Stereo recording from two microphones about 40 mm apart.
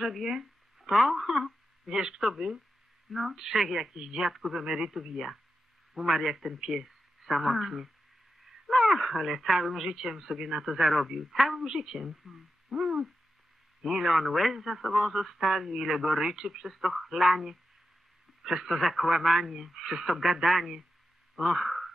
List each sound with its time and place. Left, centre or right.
0.0 s speech: centre
1.9 s a woman's voice: centre
10.6 s a woman's voice: centre